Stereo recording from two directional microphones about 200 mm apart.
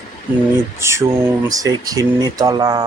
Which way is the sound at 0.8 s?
15° right (ahead or behind).